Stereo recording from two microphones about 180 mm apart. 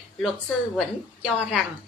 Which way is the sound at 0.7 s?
Centre (ahead or behind).